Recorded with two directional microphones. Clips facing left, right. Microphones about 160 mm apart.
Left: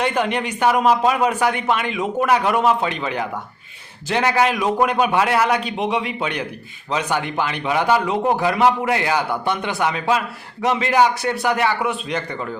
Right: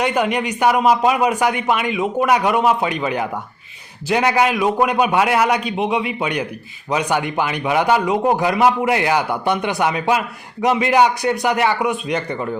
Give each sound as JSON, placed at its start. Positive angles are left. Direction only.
{"t": 0.0, "sound": "a man's voice", "side_deg": -10}